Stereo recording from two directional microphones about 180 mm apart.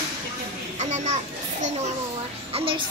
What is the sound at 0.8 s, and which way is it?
Speech, 40° right (ahead or behind).